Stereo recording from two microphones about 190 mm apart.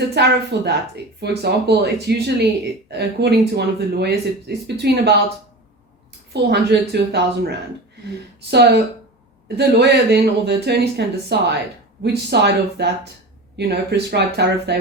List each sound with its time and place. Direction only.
0.1 s speech: 60° right (ahead or behind)
6.3 s speech: 60° right (ahead or behind)